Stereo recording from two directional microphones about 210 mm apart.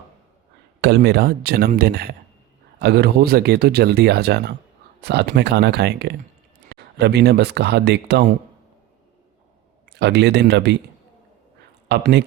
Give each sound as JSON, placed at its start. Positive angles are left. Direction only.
{"t": 0.8, "sound": "speech", "side_deg": -50}
{"t": 9.9, "sound": "speech", "side_deg": -55}
{"t": 11.9, "sound": "speech", "side_deg": -55}